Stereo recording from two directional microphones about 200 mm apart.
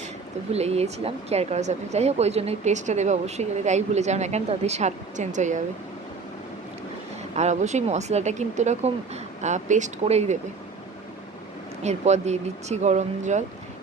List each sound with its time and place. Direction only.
0.5 s speech: 30° right (ahead or behind)
7.3 s speech: 35° right (ahead or behind)
11.8 s speech: 35° right (ahead or behind)